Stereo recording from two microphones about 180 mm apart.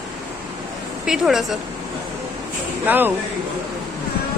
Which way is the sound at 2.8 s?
10° right (ahead or behind).